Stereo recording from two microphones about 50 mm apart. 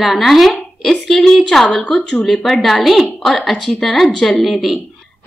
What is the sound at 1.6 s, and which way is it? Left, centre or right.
A woman's voice, centre.